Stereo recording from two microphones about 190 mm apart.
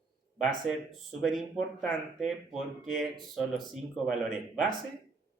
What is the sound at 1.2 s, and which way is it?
Speech, centre (ahead or behind).